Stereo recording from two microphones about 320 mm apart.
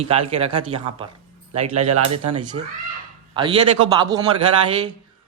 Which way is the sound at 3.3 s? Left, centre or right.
Centre.